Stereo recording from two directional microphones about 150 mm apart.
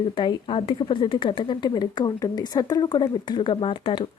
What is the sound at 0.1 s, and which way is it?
Speech, 35° left (ahead or behind).